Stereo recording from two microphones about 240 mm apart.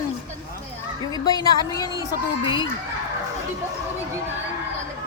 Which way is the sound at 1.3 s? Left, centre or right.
Centre.